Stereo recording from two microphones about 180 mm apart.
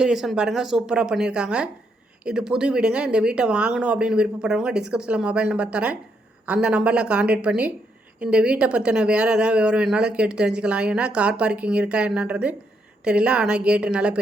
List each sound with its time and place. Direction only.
0.0 s speech: centre (ahead or behind)